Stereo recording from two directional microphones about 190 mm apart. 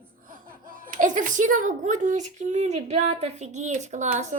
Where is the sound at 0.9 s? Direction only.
40° right (ahead or behind).